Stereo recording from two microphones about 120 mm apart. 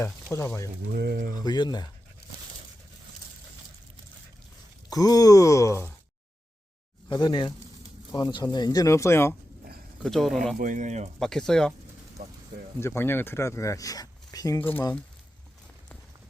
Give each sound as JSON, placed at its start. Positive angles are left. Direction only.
{"t": 0.3, "sound": "speech", "side_deg": 25}
{"t": 1.5, "sound": "speech", "side_deg": 35}
{"t": 4.9, "sound": "speech", "side_deg": 30}
{"t": 7.1, "sound": "speech", "side_deg": 40}
{"t": 10.0, "sound": "speech", "side_deg": 5}
{"t": 10.6, "sound": "speech", "side_deg": -90}
{"t": 11.2, "sound": "speech", "side_deg": 5}
{"t": 12.8, "sound": "speech", "side_deg": 20}
{"t": 14.6, "sound": "speech", "side_deg": 15}